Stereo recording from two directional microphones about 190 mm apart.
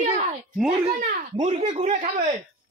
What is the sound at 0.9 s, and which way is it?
Speech, 50° right (ahead or behind).